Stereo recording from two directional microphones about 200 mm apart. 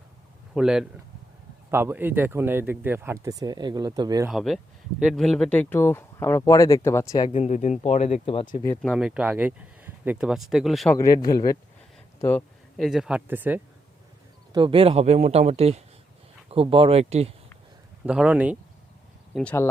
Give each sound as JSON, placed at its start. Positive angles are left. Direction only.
{"t": 0.5, "sound": "speech", "side_deg": -5}
{"t": 4.3, "sound": "speech", "side_deg": 0}
{"t": 7.3, "sound": "speech", "side_deg": 35}
{"t": 8.8, "sound": "speech", "side_deg": 0}
{"t": 10.9, "sound": "speech", "side_deg": 20}
{"t": 12.7, "sound": "speech", "side_deg": 0}
{"t": 14.5, "sound": "a man's voice", "side_deg": -25}
{"t": 18.0, "sound": "speech", "side_deg": -5}
{"t": 19.3, "sound": "speech", "side_deg": 5}